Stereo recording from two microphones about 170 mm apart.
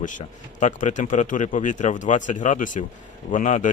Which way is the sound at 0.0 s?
45° left (ahead or behind).